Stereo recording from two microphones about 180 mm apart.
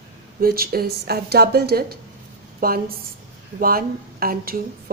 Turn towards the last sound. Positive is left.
turn(degrees=-55)  # may be behind; listen again after turning